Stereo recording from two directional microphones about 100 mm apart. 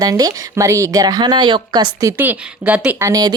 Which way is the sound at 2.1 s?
20° right (ahead or behind).